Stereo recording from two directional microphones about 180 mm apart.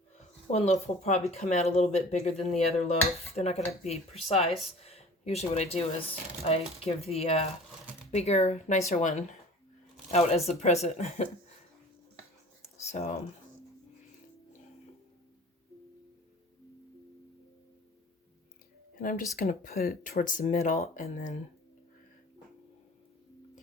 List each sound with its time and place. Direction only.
0.5 s speech: 35° left (ahead or behind)
12.6 s a sound: 40° left (ahead or behind)
18.9 s speech: 50° left (ahead or behind)
19.5 s speech: 35° left (ahead or behind)
19.8 s speech: 55° left (ahead or behind)